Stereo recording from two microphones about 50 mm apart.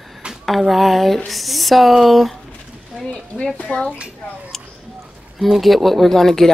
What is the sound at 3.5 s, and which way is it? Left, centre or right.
Speech, left.